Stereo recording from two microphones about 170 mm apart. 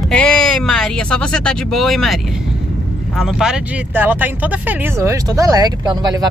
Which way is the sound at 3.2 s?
5° right (ahead or behind).